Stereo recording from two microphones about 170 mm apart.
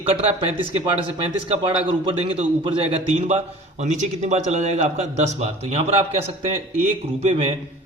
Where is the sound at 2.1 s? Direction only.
30° right (ahead or behind).